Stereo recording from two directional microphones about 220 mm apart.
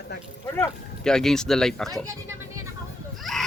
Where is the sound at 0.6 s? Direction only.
5° left (ahead or behind).